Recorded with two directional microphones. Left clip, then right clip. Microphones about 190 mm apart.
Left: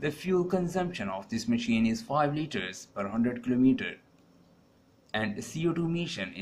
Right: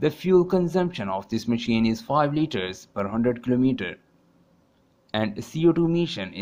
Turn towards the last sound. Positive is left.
turn(degrees=-40)  # may be behind; listen again after turning